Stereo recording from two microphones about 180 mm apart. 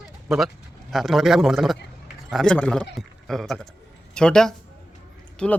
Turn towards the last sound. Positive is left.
turn(degrees=5)  # may be behind; listen again after turning